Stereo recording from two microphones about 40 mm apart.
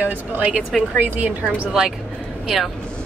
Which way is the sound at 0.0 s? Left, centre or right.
Right.